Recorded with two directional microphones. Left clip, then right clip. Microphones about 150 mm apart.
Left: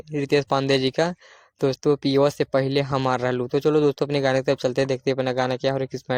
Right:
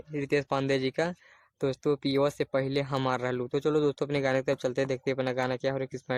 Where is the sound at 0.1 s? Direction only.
30° left (ahead or behind).